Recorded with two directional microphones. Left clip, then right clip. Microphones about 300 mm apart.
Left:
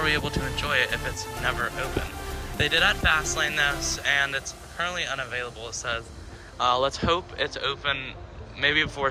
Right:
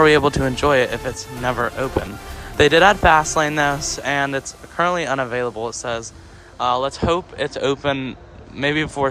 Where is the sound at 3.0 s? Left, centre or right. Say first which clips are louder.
Right 9 dB; right.